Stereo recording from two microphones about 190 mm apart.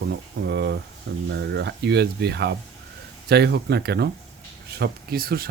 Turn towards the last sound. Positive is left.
turn(degrees=-50)  # may be behind; listen again after turning